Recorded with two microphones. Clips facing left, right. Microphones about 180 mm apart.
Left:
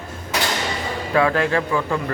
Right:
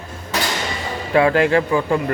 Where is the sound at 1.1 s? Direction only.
25° right (ahead or behind).